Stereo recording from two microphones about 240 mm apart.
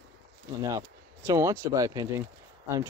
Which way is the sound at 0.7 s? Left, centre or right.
Centre.